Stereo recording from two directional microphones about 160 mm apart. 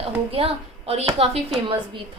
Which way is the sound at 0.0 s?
35° right (ahead or behind).